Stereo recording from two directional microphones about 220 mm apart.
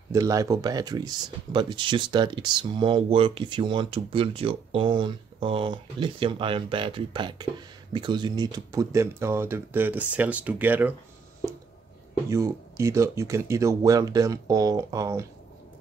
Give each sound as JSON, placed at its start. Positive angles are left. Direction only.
{"t": 0.1, "sound": "speech", "side_deg": -15}
{"t": 12.3, "sound": "speech", "side_deg": -15}